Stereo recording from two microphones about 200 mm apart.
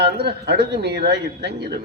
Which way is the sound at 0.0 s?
55° right (ahead or behind).